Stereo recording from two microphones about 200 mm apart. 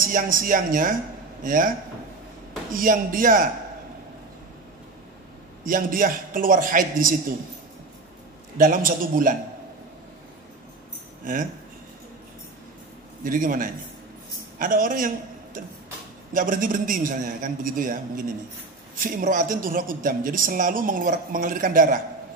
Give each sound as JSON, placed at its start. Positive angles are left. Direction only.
{"t": 0.0, "sound": "a woman's voice", "side_deg": -45}
{"t": 2.7, "sound": "a woman's voice", "side_deg": -45}
{"t": 5.7, "sound": "a woman's voice", "side_deg": -45}
{"t": 8.5, "sound": "a woman's voice", "side_deg": -45}
{"t": 11.3, "sound": "speech", "side_deg": -40}
{"t": 13.2, "sound": "a woman's voice", "side_deg": -45}